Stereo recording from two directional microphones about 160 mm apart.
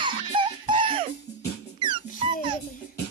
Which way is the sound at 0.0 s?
30° right (ahead or behind).